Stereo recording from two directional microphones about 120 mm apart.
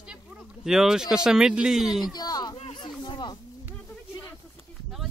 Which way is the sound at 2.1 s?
35° left (ahead or behind).